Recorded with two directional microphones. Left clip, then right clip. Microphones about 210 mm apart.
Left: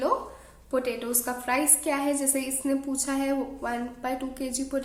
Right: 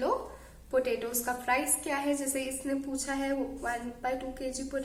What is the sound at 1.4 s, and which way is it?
A woman's voice, 45° left (ahead or behind).